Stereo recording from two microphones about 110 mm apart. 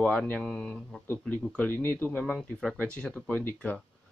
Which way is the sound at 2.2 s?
Centre (ahead or behind).